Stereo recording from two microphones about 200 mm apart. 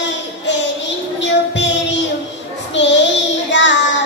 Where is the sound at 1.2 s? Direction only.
65° left (ahead or behind).